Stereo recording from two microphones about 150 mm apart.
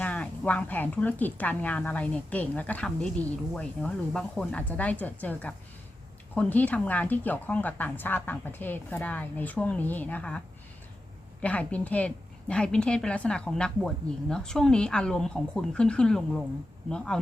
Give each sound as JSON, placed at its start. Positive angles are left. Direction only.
{"t": 0.0, "sound": "a woman's voice", "side_deg": 10}